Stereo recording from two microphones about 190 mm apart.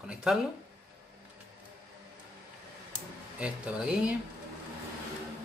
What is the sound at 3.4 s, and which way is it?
Speech, 5° right (ahead or behind).